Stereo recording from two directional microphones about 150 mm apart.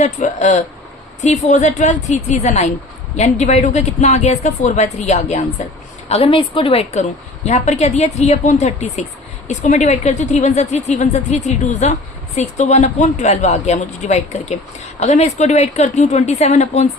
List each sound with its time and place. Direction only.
0.0 s a woman's voice: 50° left (ahead or behind)